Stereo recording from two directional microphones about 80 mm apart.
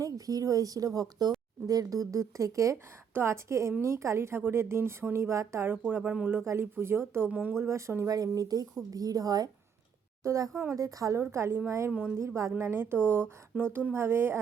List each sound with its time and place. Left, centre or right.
0.0 s a woman's voice: right
5.7 s speech: centre
6.4 s a woman's voice: right
7.3 s speech: centre
7.6 s a woman's voice: right
11.9 s speech: centre
12.1 s a woman's voice: right